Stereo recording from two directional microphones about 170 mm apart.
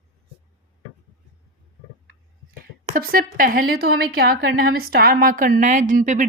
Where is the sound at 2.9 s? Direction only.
60° right (ahead or behind).